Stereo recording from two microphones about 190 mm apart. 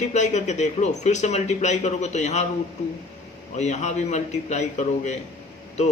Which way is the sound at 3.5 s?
35° left (ahead or behind).